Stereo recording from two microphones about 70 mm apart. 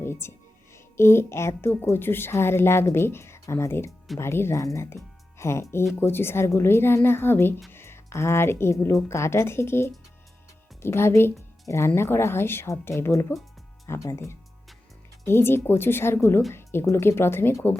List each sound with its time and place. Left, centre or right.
0.0 s music: left
1.7 s speech: left
15.3 s speech: left